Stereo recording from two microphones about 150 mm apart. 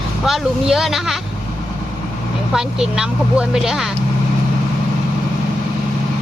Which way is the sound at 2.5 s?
5° right (ahead or behind).